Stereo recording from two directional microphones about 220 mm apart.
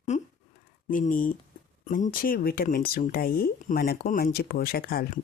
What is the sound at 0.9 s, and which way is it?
Speech, 40° left (ahead or behind).